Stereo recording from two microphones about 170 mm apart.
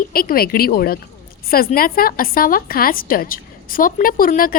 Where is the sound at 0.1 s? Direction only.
60° left (ahead or behind).